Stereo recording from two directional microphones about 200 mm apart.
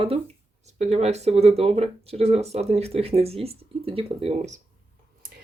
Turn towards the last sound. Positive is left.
turn(degrees=-35)  # may be behind; listen again after turning